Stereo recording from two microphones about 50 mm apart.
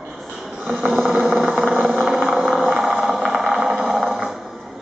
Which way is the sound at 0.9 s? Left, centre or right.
Centre.